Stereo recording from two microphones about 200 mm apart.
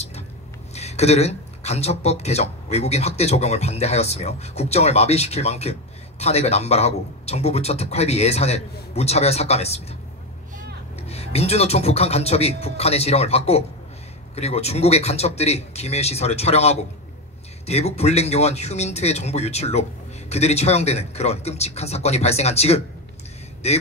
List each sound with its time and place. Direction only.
0.7 s speech: 30° left (ahead or behind)
11.1 s speech: 30° left (ahead or behind)